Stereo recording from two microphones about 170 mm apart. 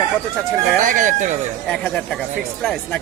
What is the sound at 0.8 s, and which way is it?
Speech, 50° right (ahead or behind).